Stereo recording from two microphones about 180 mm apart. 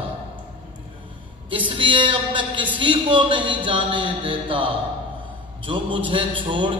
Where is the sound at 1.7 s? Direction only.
30° right (ahead or behind).